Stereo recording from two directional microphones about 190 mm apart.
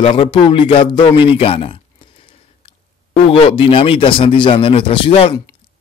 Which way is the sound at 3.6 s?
30° left (ahead or behind).